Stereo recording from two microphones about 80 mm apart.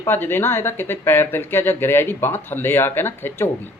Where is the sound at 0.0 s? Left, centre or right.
Left.